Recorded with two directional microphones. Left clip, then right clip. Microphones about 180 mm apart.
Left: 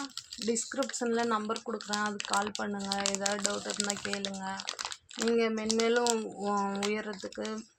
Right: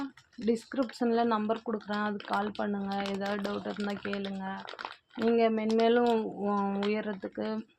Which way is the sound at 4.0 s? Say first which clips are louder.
Left 1 dB; 20° right (ahead or behind).